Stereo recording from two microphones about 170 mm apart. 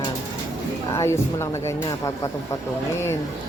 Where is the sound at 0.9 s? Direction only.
15° left (ahead or behind).